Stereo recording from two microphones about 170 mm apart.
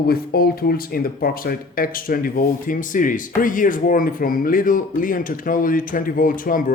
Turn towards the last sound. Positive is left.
turn(degrees=55)  # may be behind; listen again after turning